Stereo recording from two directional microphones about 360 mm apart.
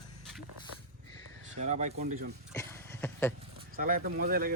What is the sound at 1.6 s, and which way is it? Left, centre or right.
Speech, centre.